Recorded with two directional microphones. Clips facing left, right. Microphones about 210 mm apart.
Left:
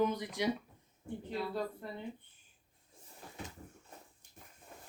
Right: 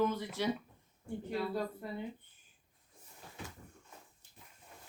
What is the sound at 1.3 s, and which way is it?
Speech, 5° right (ahead or behind).